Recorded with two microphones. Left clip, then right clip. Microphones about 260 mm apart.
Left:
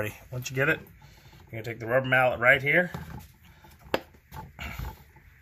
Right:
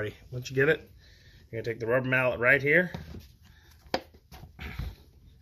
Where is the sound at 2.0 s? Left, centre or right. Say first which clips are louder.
Left 5 dB; left.